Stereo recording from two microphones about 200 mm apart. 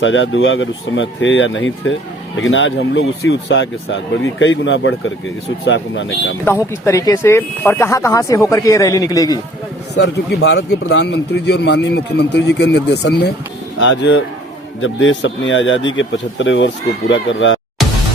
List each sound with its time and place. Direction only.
0.0 s a man's voice: 70° left (ahead or behind)
6.4 s speech: 10° left (ahead or behind)
9.9 s a man's voice: 65° left (ahead or behind)